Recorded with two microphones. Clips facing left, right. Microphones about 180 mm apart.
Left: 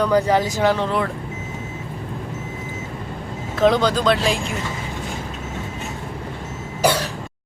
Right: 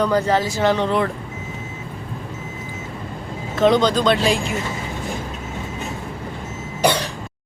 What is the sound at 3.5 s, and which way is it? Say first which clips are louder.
Speech: right 1 dB; centre (ahead or behind).